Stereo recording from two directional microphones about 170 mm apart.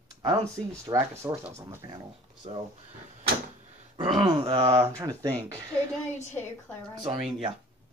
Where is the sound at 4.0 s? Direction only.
25° right (ahead or behind).